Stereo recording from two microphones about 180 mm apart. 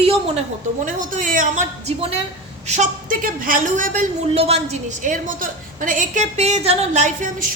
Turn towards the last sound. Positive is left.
turn(degrees=-45)  # may be behind; listen again after turning